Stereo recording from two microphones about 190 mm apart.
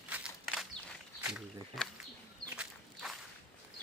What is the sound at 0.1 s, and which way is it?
Walk, 5° right (ahead or behind).